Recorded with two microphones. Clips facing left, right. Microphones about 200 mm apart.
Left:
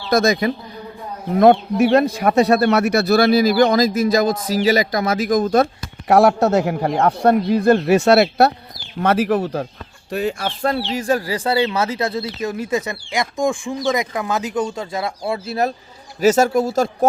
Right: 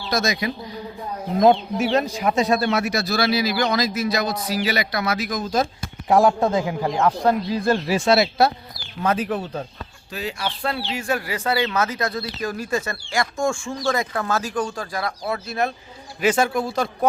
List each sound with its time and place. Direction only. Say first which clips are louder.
0.1 s speech: left 7 dB; 55° left (ahead or behind)
6.1 s speech: left 4 dB; 75° left (ahead or behind)
10.1 s speech: left 7 dB; 50° left (ahead or behind)